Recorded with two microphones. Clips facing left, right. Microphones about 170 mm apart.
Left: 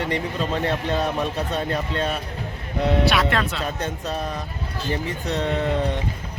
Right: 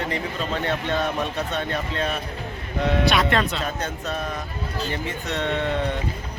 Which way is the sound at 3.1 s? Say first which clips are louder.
Right 1 dB; 5° left (ahead or behind).